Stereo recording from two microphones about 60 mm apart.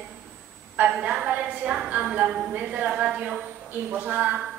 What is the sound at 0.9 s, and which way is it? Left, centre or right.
A woman's voice, centre.